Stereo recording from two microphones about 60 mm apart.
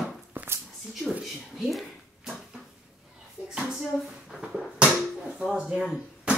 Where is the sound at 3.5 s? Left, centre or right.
Centre.